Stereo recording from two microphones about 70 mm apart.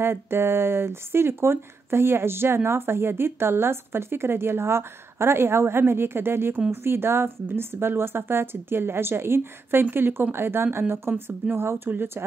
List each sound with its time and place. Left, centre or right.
0.0 s speech: right